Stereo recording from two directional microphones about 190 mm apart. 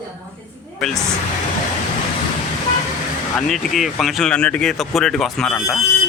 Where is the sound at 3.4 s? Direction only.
Centre (ahead or behind).